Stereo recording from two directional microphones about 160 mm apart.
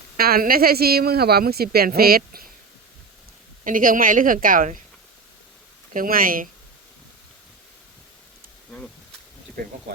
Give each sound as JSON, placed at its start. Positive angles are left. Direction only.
{"t": 0.2, "sound": "a woman's voice", "side_deg": -70}
{"t": 3.6, "sound": "a woman's voice", "side_deg": -60}
{"t": 5.9, "sound": "a woman's voice", "side_deg": -60}